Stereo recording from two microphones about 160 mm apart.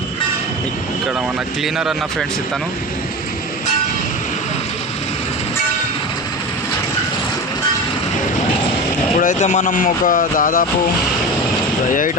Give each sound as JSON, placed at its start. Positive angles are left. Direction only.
{"t": 1.6, "sound": "speech", "side_deg": 0}
{"t": 9.1, "sound": "speech", "side_deg": 50}